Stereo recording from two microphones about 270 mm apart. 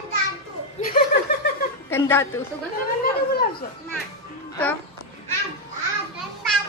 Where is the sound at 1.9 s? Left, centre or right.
Centre.